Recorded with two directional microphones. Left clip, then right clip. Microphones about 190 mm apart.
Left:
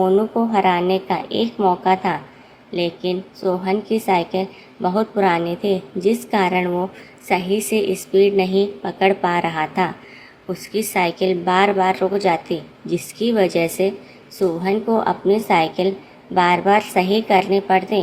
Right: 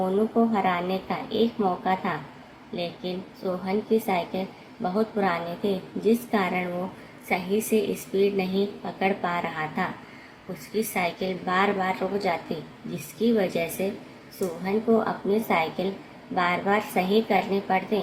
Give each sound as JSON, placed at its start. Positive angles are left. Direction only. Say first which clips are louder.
{"t": 0.5, "sound": "a woman's voice", "louder": "left 9 dB", "side_deg": 50}